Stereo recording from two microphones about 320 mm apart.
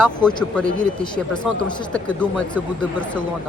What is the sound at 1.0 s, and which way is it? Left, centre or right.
Speech, centre.